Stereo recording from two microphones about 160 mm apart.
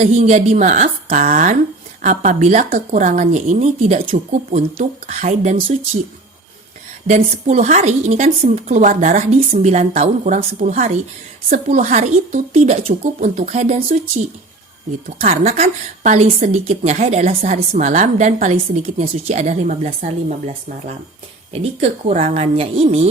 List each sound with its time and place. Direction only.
0.0 s a woman's voice: 45° right (ahead or behind)
7.1 s a woman's voice: 50° right (ahead or behind)
15.2 s a woman's voice: 50° right (ahead or behind)